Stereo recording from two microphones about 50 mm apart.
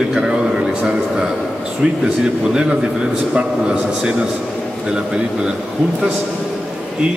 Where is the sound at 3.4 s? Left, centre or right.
Right.